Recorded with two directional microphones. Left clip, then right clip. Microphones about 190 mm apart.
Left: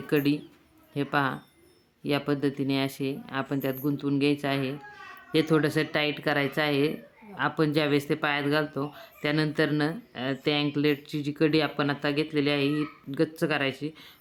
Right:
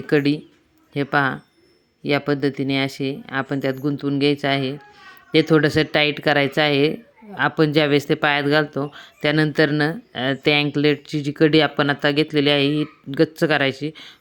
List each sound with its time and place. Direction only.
0.1 s speech: 25° right (ahead or behind)